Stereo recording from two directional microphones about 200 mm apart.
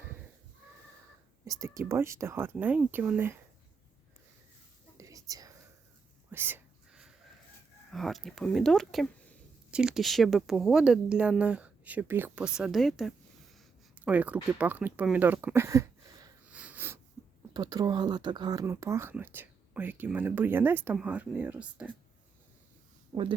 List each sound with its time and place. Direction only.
1.5 s speech: 15° right (ahead or behind)
4.9 s whispering: 15° right (ahead or behind)
6.3 s a sound: 10° right (ahead or behind)
7.9 s speech: centre (ahead or behind)
13.9 s a sound: 5° right (ahead or behind)
17.5 s speech: 20° right (ahead or behind)